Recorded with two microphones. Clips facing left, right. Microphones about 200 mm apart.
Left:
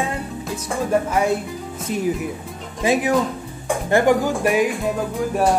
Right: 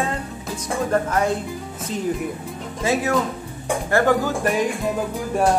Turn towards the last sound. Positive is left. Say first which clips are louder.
# left 1 dB
turn(degrees=0)  # may be behind; listen again after turning